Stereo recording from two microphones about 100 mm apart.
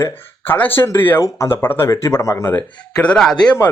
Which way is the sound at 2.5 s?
15° left (ahead or behind).